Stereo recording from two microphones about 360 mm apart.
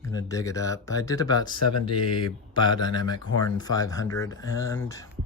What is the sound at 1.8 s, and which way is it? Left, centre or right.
Speech, left.